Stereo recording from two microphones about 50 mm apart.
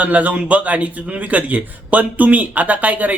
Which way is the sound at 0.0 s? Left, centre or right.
Right.